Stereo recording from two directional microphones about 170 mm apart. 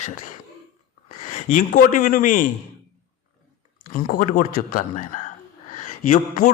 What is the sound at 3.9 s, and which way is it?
A man's voice, 55° left (ahead or behind).